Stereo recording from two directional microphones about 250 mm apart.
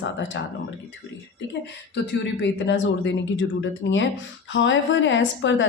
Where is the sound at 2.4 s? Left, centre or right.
Left.